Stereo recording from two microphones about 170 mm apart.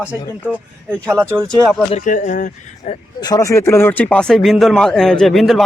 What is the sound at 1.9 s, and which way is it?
Speech, 45° left (ahead or behind).